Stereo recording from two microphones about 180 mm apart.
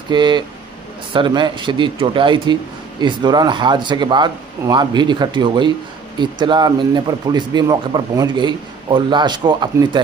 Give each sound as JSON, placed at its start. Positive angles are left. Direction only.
{"t": 0.1, "sound": "speech", "side_deg": -25}